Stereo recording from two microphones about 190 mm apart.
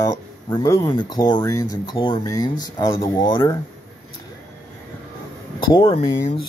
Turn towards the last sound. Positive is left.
turn(degrees=30)  # may be behind; listen again after turning